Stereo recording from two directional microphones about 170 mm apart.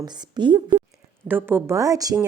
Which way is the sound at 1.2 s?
10° right (ahead or behind).